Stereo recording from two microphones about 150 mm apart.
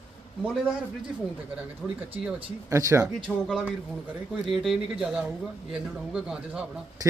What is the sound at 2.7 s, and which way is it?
Speech, 20° right (ahead or behind).